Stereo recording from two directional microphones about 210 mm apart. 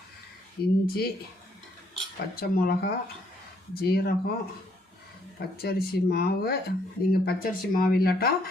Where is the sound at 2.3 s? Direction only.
50° left (ahead or behind).